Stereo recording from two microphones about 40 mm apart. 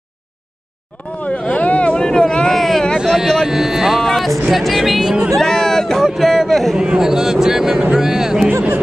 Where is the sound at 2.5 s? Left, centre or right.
Centre.